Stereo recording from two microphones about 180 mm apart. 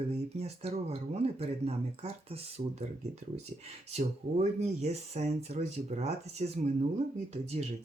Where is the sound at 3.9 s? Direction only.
35° right (ahead or behind).